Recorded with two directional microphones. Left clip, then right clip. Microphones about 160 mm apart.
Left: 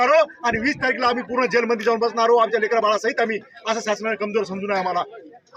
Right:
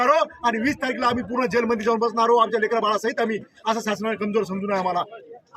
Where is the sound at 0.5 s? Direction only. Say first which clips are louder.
Left 3 dB; 25° right (ahead or behind).